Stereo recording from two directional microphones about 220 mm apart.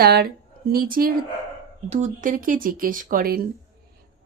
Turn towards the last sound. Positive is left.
turn(degrees=-40)  # may be behind; listen again after turning